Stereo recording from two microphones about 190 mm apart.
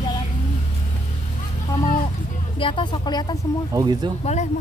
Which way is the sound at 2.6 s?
25° left (ahead or behind).